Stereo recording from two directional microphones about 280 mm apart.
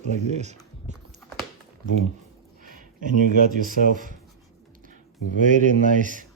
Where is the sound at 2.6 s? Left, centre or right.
Right.